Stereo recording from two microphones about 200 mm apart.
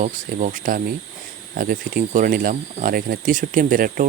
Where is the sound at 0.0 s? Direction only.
40° right (ahead or behind).